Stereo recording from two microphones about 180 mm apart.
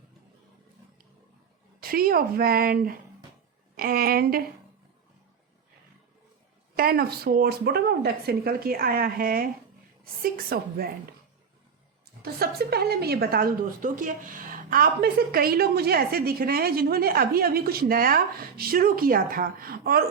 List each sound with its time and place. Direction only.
1.8 s a woman's voice: 55° right (ahead or behind)
6.7 s a woman's voice: 55° right (ahead or behind)
12.2 s a woman's voice: 60° right (ahead or behind)